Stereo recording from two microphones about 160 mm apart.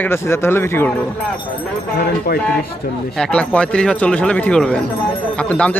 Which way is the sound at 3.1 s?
5° left (ahead or behind).